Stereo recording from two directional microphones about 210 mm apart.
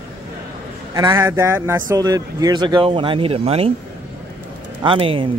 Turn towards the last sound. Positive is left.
turn(degrees=-25)  # may be behind; listen again after turning